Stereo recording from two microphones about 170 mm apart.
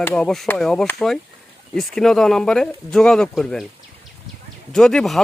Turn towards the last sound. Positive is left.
turn(degrees=0)  # may be behind; listen again after turning